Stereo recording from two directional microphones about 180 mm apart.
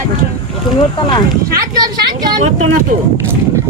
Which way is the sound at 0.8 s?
25° left (ahead or behind).